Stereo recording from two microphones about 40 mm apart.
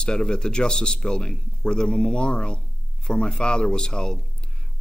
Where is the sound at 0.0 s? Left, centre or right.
Centre.